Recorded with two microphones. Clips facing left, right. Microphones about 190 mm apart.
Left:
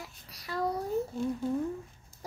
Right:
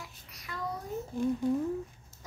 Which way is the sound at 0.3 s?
35° left (ahead or behind).